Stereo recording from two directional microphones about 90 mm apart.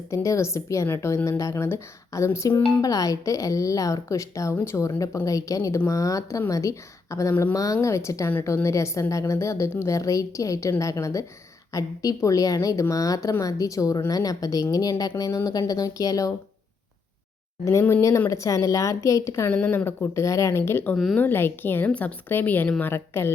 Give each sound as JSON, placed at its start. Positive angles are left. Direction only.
{"t": 0.1, "sound": "a woman's voice", "side_deg": 35}
{"t": 2.8, "sound": "a woman's voice", "side_deg": 40}
{"t": 17.7, "sound": "a woman's voice", "side_deg": 35}
{"t": 19.6, "sound": "a woman's voice", "side_deg": 25}
{"t": 20.9, "sound": "speech", "side_deg": 0}
{"t": 21.2, "sound": "a woman's voice", "side_deg": 25}